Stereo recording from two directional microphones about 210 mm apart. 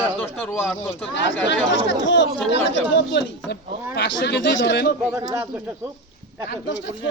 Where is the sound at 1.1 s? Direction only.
55° left (ahead or behind).